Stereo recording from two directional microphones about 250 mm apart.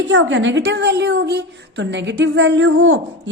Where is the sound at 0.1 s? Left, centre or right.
Right.